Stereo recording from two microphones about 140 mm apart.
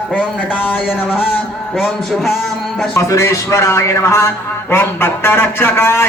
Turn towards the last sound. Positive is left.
turn(degrees=15)  # may be behind; listen again after turning